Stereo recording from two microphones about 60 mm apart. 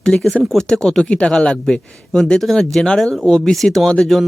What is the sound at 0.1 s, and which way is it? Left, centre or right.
A man's voice, centre.